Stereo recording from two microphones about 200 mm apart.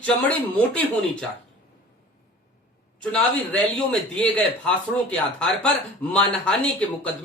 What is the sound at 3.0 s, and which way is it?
Speech, 5° left (ahead or behind).